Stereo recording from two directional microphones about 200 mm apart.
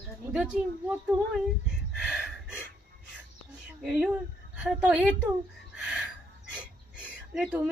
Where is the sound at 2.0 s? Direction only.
5° right (ahead or behind).